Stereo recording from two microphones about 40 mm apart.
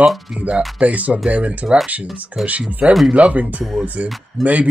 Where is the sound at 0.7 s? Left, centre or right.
Right.